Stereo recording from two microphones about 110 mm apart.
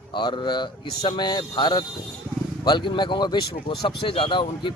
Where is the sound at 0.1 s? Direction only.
45° left (ahead or behind).